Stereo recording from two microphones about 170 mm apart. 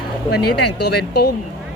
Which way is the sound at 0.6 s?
75° left (ahead or behind).